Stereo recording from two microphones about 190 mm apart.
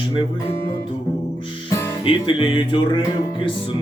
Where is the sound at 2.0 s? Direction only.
30° left (ahead or behind).